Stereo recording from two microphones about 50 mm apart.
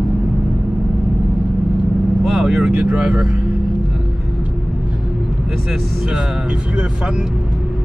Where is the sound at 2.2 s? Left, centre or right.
Centre.